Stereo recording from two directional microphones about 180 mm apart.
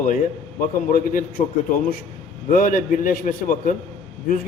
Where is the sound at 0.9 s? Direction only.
50° left (ahead or behind).